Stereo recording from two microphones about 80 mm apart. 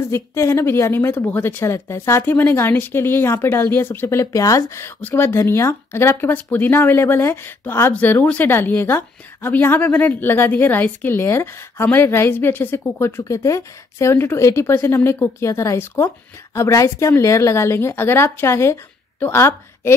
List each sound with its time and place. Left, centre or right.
0.1 s a woman's voice: left
13.2 s a woman's voice: left